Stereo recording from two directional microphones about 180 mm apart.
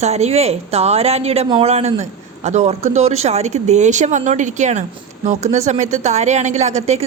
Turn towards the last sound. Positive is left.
turn(degrees=-40)  # may be behind; listen again after turning